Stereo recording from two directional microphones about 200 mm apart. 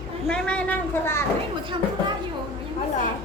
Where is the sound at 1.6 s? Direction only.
25° right (ahead or behind).